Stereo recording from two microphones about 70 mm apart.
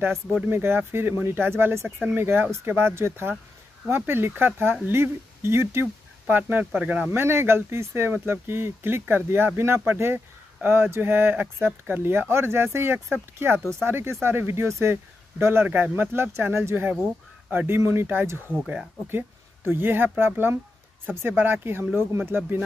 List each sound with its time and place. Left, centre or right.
0.5 s speech: right
7.1 s speech: right